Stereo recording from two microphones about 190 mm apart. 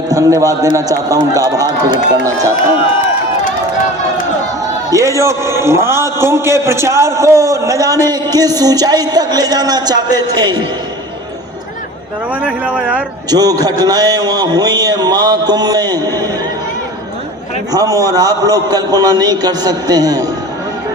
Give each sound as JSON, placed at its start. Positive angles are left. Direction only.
{"t": 0.1, "sound": "a man's voice", "side_deg": -15}
{"t": 4.9, "sound": "a man's voice", "side_deg": -15}
{"t": 12.4, "sound": "a man's voice", "side_deg": -5}
{"t": 13.3, "sound": "a man's voice", "side_deg": -20}
{"t": 17.7, "sound": "a man's voice", "side_deg": -20}